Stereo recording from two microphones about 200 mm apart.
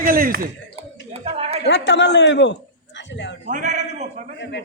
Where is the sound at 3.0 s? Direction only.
60° left (ahead or behind).